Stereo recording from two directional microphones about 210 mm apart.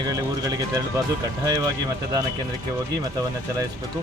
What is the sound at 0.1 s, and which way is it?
Speech, 15° right (ahead or behind).